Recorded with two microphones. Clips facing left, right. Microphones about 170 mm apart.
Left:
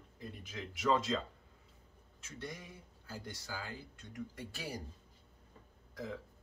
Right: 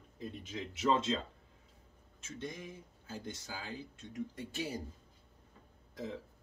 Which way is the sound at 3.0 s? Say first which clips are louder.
Right 2 dB; 25° right (ahead or behind).